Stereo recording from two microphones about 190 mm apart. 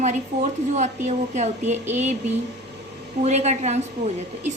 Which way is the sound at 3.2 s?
35° right (ahead or behind).